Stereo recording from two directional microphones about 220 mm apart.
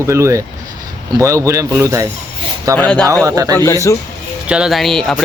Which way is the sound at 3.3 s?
15° right (ahead or behind).